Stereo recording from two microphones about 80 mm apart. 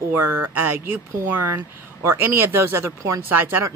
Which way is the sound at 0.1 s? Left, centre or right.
Right.